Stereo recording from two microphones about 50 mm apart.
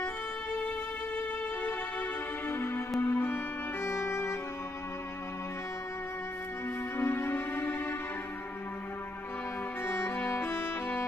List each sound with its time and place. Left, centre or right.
1.1 s music: left
3.8 s music: left
7.0 s music: left
9.8 s music: left